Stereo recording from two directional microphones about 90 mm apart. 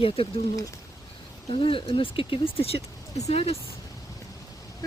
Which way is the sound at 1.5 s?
85° left.